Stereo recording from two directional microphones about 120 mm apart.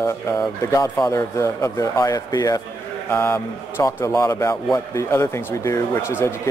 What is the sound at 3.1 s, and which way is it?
A man's voice, 20° left (ahead or behind).